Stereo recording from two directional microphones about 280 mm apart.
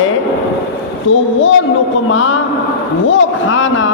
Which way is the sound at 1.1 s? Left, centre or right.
Left.